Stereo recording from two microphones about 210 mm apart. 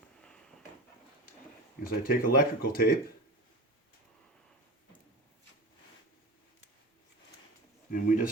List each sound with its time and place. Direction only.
1.8 s speech: 45° left (ahead or behind)
7.9 s speech: 40° left (ahead or behind)